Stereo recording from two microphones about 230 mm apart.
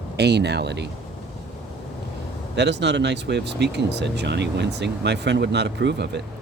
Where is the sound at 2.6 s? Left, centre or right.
Right.